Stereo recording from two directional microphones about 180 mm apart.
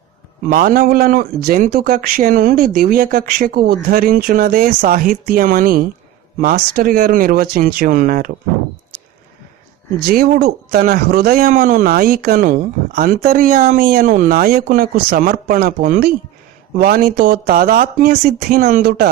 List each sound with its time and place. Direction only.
0.5 s speech: 55° right (ahead or behind)
8.9 s a sound: 55° right (ahead or behind)
10.0 s speech: 60° right (ahead or behind)